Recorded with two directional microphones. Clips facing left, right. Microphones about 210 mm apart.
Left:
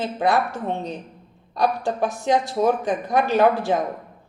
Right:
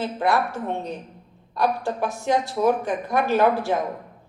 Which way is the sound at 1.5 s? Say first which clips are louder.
Left 1 dB; 15° left (ahead or behind).